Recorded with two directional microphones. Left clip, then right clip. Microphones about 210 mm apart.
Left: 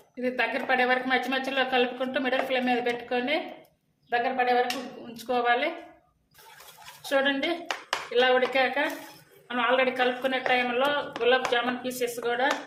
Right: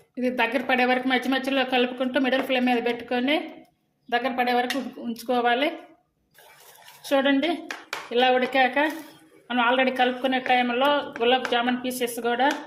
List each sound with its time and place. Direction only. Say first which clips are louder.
0.2 s a woman's voice: right 3 dB; 35° right (ahead or behind)
5.1 s speech: right 2 dB; 35° right (ahead or behind)
7.0 s a woman's voice: right 3 dB; 30° right (ahead or behind)